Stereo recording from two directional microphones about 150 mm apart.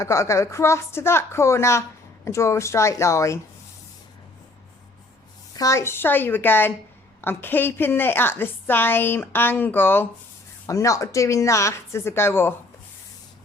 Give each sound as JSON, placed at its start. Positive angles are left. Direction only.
{"t": 0.0, "sound": "a woman's voice", "side_deg": 20}
{"t": 5.5, "sound": "a woman's voice", "side_deg": 20}